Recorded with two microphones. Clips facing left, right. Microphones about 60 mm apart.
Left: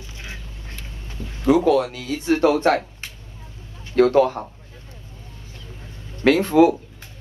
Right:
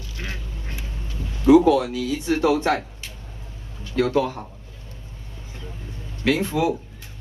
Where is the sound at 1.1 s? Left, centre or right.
Left.